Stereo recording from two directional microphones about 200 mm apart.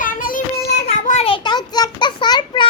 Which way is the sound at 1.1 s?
30° left (ahead or behind).